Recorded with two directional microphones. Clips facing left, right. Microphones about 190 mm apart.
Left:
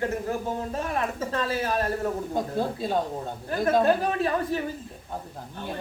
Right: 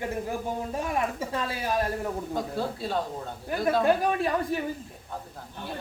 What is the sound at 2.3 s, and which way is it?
Speech, 20° left (ahead or behind).